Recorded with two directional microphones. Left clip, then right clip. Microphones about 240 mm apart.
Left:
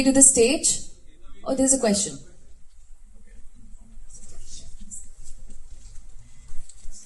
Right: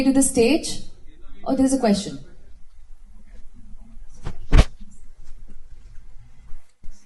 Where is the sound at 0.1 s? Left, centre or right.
Left.